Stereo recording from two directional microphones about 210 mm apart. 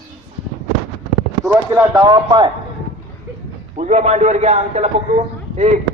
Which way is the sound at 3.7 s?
35° right (ahead or behind).